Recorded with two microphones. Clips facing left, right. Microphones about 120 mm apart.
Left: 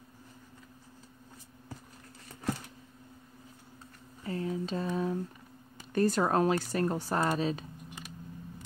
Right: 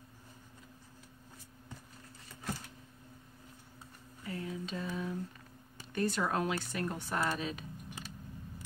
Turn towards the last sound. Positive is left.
turn(degrees=35)  # may be behind; listen again after turning